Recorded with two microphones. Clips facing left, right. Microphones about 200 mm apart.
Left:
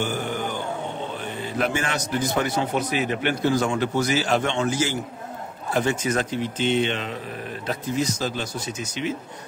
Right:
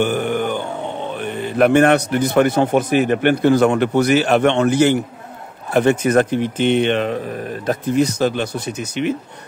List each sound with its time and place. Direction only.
0.0 s grunt: 60° right (ahead or behind)
1.2 s a man's voice: 60° right (ahead or behind)